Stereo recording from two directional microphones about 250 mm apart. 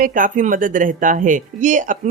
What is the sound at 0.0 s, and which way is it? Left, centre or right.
Speech, right.